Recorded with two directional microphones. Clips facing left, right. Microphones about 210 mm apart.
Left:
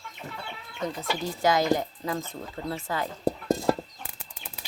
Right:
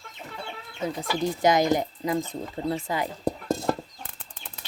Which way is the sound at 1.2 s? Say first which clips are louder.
Right 3 dB; 20° right (ahead or behind).